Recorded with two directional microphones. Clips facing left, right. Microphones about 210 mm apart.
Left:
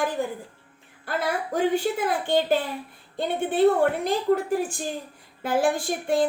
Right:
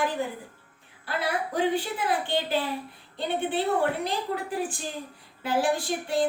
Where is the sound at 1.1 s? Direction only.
45° left (ahead or behind).